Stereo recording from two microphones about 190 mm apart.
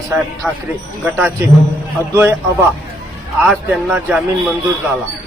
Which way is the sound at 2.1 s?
15° right (ahead or behind).